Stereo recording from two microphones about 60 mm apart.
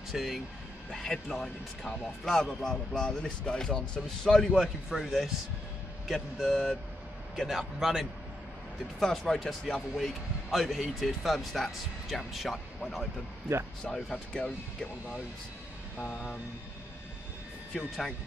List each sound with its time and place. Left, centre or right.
0.1 s speech: centre
0.9 s a man's voice: centre
6.1 s speech: centre
7.4 s a man's voice: centre
9.0 s a man's voice: centre
13.5 s speech: right
14.1 s speech: centre
16.1 s speech: centre
17.7 s speech: centre